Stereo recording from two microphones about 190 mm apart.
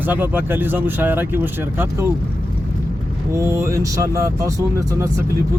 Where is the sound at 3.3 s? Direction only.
15° right (ahead or behind).